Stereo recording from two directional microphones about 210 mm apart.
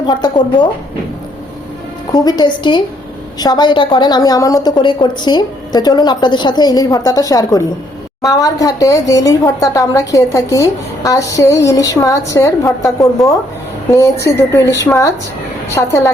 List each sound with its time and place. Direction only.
0.1 s a woman's voice: 20° left (ahead or behind)
2.1 s a woman's voice: 20° left (ahead or behind)